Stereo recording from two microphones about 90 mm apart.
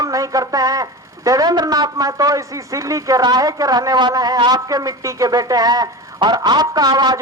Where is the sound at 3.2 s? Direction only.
50° right (ahead or behind).